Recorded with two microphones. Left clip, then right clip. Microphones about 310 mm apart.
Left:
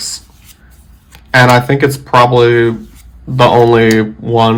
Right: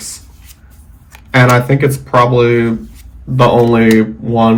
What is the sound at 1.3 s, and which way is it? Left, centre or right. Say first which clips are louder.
Speech: left 3 dB; centre.